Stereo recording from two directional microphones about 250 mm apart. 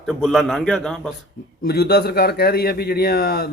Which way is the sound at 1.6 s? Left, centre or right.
Left.